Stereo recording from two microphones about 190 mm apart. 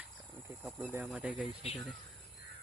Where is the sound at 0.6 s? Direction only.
5° right (ahead or behind).